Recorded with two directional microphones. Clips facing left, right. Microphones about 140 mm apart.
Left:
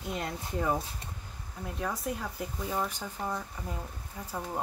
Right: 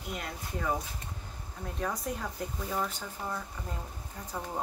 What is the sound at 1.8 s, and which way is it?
Speech, centre (ahead or behind).